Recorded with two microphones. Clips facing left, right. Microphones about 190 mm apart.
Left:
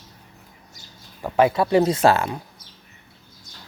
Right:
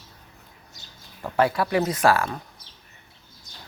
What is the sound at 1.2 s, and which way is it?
Speech, 15° left (ahead or behind).